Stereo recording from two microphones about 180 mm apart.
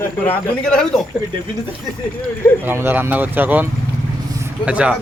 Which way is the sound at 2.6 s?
10° right (ahead or behind).